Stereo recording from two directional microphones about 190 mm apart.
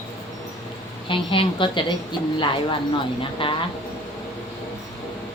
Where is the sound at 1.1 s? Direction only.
25° left (ahead or behind).